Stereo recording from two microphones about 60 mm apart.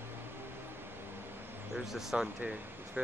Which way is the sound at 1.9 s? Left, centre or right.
Centre.